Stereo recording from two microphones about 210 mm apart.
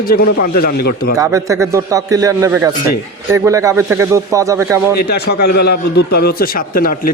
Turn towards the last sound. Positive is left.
turn(degrees=45)  # may be behind; listen again after turning